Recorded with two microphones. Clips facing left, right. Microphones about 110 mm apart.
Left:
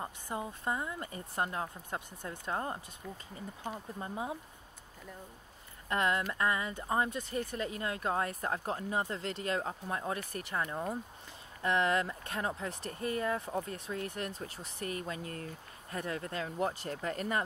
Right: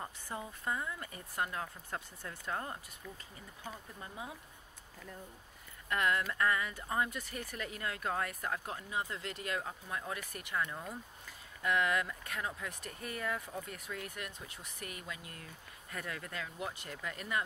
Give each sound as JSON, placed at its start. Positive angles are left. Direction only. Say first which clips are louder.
{"t": 0.0, "sound": "speech", "louder": "left 4 dB", "side_deg": 25}
{"t": 5.9, "sound": "speech", "louder": "left 2 dB", "side_deg": 25}